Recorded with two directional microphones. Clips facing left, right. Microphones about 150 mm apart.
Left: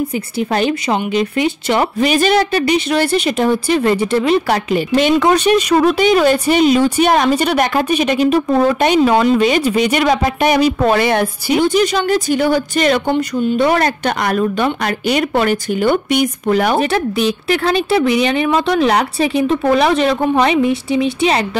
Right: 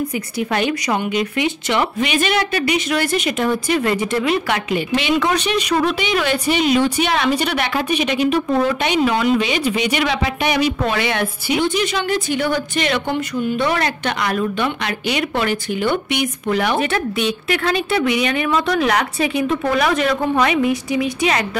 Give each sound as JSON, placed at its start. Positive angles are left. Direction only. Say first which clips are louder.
{"t": 0.1, "sound": "a woman's voice", "louder": "left 3 dB", "side_deg": 30}
{"t": 13.6, "sound": "a woman's voice", "louder": "left 8 dB", "side_deg": 45}